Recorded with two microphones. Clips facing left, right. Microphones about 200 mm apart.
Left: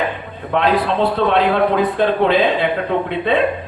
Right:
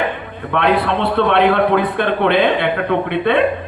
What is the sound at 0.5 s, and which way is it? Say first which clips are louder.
A man's voice: even; 60° right (ahead or behind).